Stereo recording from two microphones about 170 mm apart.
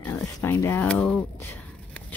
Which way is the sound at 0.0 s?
10° left (ahead or behind).